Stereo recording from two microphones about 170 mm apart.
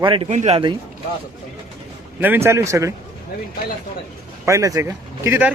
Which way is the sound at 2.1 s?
10° right (ahead or behind).